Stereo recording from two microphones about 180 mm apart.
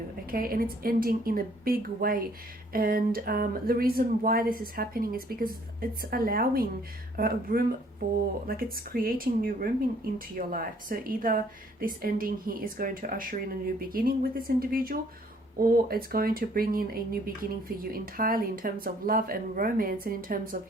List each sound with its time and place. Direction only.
0.3 s speech: 55° right (ahead or behind)